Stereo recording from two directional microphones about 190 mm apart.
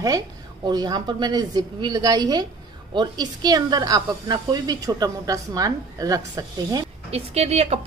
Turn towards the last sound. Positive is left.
turn(degrees=-35)  # may be behind; listen again after turning